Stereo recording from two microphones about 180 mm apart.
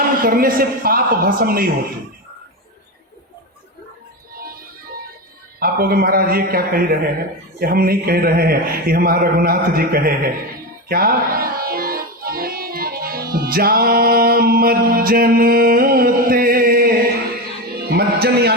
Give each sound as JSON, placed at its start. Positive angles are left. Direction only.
{"t": 0.2, "sound": "a woman's voice", "side_deg": -55}
{"t": 5.5, "sound": "a man's voice", "side_deg": -55}
{"t": 10.8, "sound": "music", "side_deg": -55}